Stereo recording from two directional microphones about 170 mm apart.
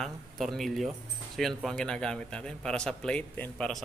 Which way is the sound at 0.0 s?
Centre (ahead or behind).